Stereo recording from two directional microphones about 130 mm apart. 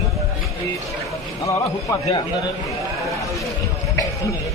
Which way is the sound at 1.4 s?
25° left (ahead or behind).